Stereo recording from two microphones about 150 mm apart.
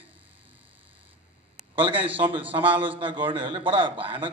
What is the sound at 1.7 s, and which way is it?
A man's voice, 35° right (ahead or behind).